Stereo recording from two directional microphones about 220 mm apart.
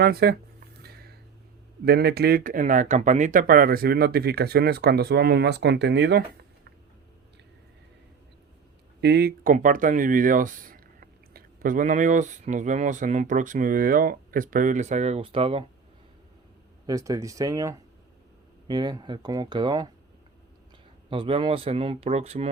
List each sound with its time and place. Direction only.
0.0 s speech: 45° right (ahead or behind)
0.8 s a sound: 45° right (ahead or behind)
1.8 s speech: 45° right (ahead or behind)
9.0 s speech: 50° right (ahead or behind); by 15.6 s 25° right (ahead or behind)
16.8 s speech: 15° right (ahead or behind)
21.1 s speech: 25° right (ahead or behind)